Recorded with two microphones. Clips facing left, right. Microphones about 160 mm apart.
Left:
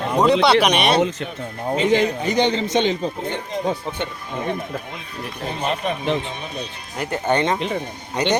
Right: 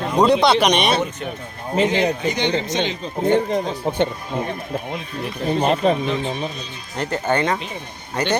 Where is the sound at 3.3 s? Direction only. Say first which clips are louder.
Right 10 dB; 50° right (ahead or behind).